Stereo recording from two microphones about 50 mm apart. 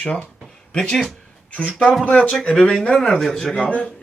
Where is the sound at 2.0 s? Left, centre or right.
Left; by 3.5 s centre.